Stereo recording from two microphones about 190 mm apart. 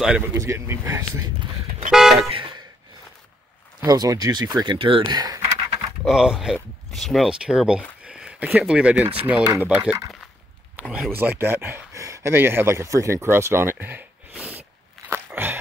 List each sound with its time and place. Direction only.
0.3 s speech: 15° right (ahead or behind)
1.9 s toot: centre (ahead or behind)
2.1 s car: 25° right (ahead or behind)
3.8 s speech: 20° right (ahead or behind)
6.0 s speech: centre (ahead or behind)
15.0 s dog: 10° right (ahead or behind)